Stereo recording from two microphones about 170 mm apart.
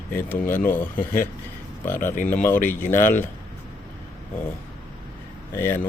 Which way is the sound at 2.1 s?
50° left (ahead or behind).